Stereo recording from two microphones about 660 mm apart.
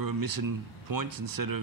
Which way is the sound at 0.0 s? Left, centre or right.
Right.